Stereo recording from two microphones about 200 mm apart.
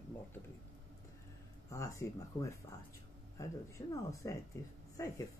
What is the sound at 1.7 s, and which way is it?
Speech, 15° left (ahead or behind).